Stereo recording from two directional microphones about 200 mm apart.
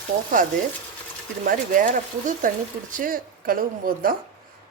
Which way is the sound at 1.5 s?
40° right (ahead or behind).